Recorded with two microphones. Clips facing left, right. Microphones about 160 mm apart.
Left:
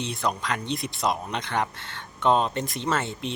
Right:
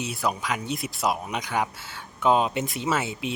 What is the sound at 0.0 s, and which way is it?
Speech, 5° right (ahead or behind).